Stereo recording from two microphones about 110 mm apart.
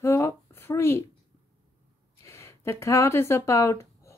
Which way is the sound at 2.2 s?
25° left (ahead or behind).